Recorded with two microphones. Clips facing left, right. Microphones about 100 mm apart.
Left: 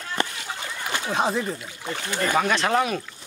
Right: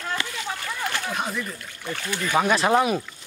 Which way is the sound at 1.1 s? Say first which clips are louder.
Left 5 dB; 30° left (ahead or behind).